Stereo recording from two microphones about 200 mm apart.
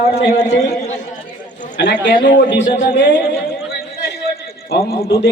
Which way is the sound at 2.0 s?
50° left (ahead or behind).